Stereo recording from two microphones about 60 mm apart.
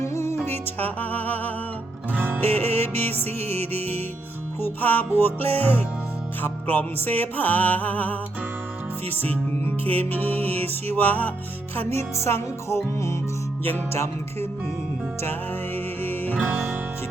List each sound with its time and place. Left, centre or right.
0.0 s music: left
0.5 s music: left
2.1 s music: right
2.5 s music: left
11.9 s music: left
15.2 s music: left